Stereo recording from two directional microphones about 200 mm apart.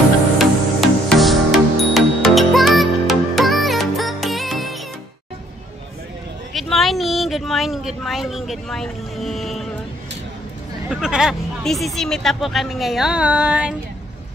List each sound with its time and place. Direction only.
0.4 s music: centre (ahead or behind)
6.5 s speech: centre (ahead or behind)
10.9 s speech: 5° right (ahead or behind)